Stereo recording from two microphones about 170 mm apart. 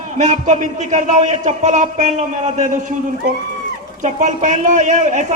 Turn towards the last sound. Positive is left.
turn(degrees=-45)  # may be behind; listen again after turning